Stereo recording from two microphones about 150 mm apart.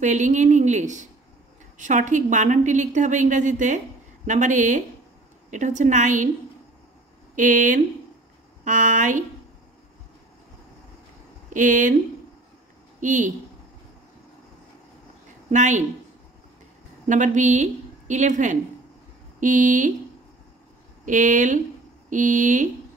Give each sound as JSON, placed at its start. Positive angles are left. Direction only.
{"t": 0.0, "sound": "a woman's voice", "side_deg": -55}
{"t": 7.3, "sound": "a woman's voice", "side_deg": -60}
{"t": 11.5, "sound": "a woman's voice", "side_deg": -60}
{"t": 13.0, "sound": "a woman's voice", "side_deg": -55}
{"t": 15.5, "sound": "a woman's voice", "side_deg": -55}
{"t": 17.1, "sound": "a woman's voice", "side_deg": -55}
{"t": 21.0, "sound": "a woman's voice", "side_deg": -60}